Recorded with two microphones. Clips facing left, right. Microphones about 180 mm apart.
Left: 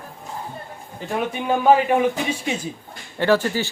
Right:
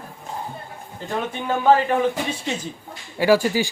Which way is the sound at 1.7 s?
15° left (ahead or behind).